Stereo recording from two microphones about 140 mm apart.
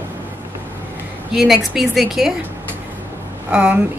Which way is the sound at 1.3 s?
5° right (ahead or behind).